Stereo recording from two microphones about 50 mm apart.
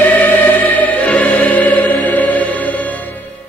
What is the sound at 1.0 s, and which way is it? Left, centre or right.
Music, left.